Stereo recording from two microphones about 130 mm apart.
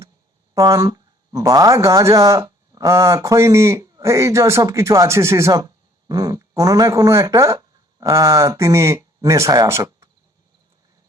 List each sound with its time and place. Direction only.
0.5 s speech: 25° right (ahead or behind)